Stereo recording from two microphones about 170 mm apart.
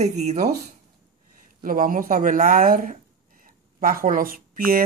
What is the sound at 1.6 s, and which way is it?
Speech, 55° right (ahead or behind).